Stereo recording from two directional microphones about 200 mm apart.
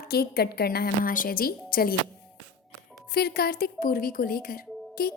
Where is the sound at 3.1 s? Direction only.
50° left (ahead or behind).